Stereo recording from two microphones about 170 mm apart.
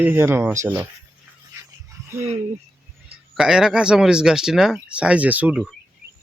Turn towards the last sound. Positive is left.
turn(degrees=-10)  # may be behind; listen again after turning